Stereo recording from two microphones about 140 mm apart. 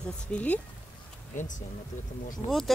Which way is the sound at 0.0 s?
10° left (ahead or behind).